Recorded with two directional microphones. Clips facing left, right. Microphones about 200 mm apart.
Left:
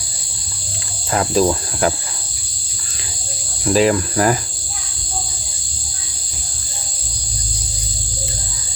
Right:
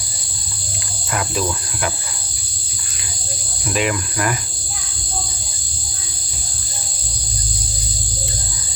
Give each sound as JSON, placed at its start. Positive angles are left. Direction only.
{"t": 1.1, "sound": "cricket", "side_deg": 35}
{"t": 3.7, "sound": "cricket", "side_deg": 35}